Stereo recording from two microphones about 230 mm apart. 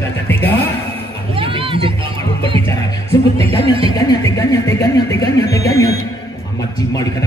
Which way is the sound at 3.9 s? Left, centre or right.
Centre.